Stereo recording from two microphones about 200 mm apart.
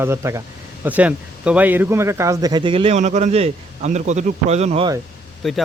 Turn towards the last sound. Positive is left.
turn(degrees=0)  # may be behind; listen again after turning